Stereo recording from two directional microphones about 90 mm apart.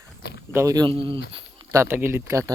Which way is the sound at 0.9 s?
85° right.